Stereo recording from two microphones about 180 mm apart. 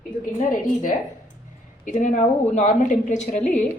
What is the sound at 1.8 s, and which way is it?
A woman's voice, 45° left (ahead or behind).